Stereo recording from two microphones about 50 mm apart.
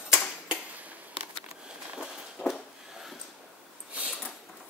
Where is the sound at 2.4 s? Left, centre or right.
Left.